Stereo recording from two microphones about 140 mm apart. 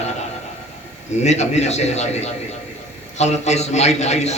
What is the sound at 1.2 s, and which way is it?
A man's voice, 55° left (ahead or behind).